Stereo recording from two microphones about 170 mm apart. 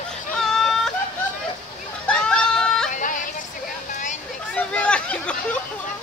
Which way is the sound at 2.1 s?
5° left (ahead or behind).